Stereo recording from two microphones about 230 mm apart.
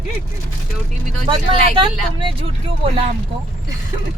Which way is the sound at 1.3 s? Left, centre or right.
Right.